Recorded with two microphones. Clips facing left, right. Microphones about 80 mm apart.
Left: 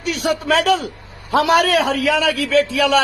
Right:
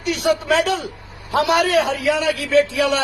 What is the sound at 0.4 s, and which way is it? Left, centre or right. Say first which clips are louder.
Speech: left 4 dB; left.